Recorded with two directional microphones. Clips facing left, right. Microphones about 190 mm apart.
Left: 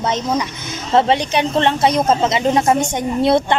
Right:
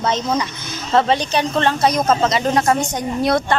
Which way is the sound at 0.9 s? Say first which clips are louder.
Left 1 dB; 25° left (ahead or behind).